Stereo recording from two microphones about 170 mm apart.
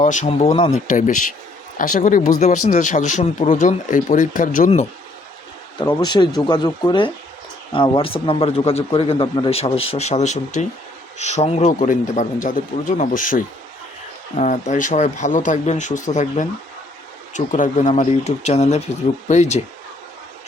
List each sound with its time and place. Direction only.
0.0 s a man's voice: 45° left (ahead or behind)
0.9 s speech: 50° left (ahead or behind)
5.8 s a man's voice: 25° left (ahead or behind); by 19.6 s 45° left (ahead or behind)